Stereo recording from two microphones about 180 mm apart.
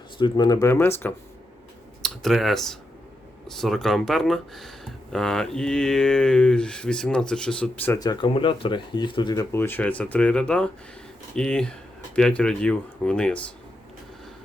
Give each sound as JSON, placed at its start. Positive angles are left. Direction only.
{"t": 0.2, "sound": "speech", "side_deg": 25}
{"t": 2.0, "sound": "speech", "side_deg": 0}
{"t": 7.9, "sound": "speech", "side_deg": 20}